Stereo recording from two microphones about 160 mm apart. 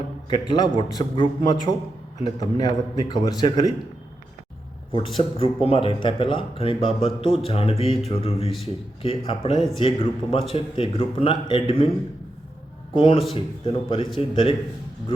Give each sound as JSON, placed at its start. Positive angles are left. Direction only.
{"t": 0.4, "sound": "speech", "side_deg": 30}
{"t": 4.9, "sound": "speech", "side_deg": 30}
{"t": 12.9, "sound": "speech", "side_deg": 30}